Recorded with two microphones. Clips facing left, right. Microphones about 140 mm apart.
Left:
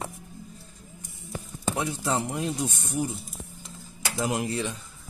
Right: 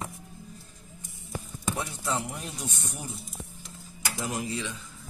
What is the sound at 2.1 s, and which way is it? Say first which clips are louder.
Speech: left 4 dB; 90° left.